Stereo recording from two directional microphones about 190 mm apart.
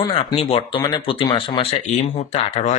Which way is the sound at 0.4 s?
30° left (ahead or behind).